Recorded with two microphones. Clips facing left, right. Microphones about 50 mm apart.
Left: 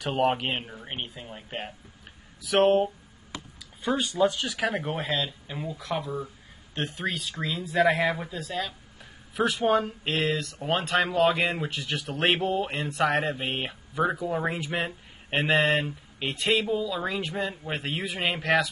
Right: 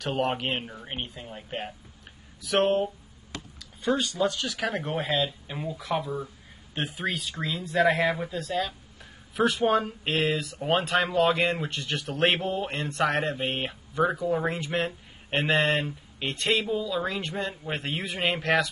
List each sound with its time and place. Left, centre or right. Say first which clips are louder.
0.0 s speech: left 2 dB; centre
4.0 s speech: left 2 dB; centre
4.5 s speech: left 1 dB; centre